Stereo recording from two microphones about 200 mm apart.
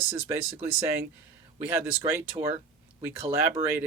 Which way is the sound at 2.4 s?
20° right (ahead or behind).